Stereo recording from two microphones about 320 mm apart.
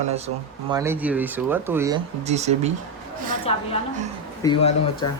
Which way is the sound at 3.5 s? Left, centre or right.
Centre.